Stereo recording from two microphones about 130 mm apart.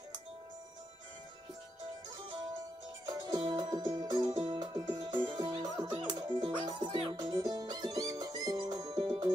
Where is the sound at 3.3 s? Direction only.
35° right (ahead or behind).